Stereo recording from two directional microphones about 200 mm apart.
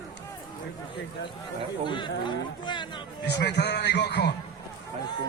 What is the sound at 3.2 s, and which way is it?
A man's voice, 55° left (ahead or behind).